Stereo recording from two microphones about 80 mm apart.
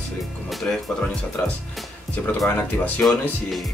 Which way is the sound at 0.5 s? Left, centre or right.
Centre.